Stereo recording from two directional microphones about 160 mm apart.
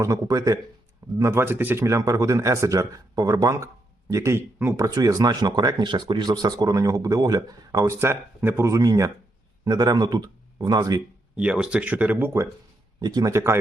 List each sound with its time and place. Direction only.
0.0 s speech: 20° right (ahead or behind)
11.3 s speech: 5° right (ahead or behind)